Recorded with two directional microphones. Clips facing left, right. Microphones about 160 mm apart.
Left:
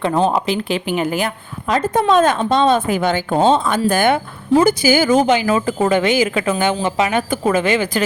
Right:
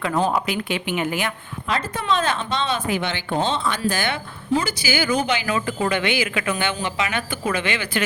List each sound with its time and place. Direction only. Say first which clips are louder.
0.0 s speech: left 5 dB; 25° left (ahead or behind)